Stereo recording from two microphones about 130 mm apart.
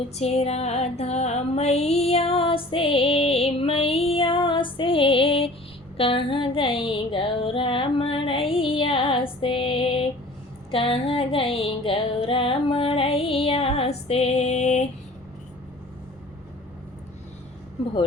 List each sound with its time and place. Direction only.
0.2 s music: 55° left (ahead or behind)